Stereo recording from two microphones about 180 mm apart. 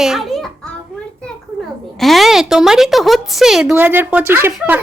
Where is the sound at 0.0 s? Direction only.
Centre (ahead or behind).